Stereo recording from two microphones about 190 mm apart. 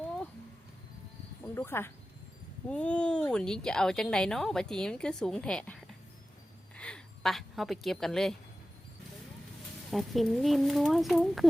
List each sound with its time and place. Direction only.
1.5 s a woman's voice: 10° left (ahead or behind)
9.9 s speech: centre (ahead or behind)